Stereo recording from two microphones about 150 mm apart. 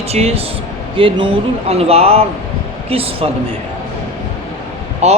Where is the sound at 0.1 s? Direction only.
45° right (ahead or behind).